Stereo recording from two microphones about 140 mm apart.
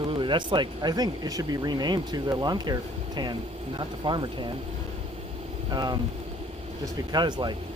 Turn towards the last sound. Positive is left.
turn(degrees=-30)  # may be behind; listen again after turning